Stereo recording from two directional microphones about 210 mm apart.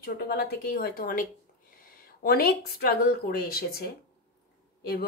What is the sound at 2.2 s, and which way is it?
A woman's voice, 45° left (ahead or behind).